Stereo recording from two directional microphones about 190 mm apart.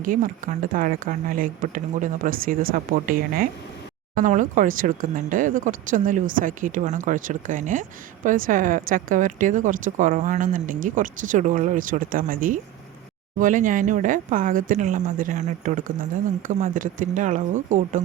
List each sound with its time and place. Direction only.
0.0 s speech: 45° right (ahead or behind)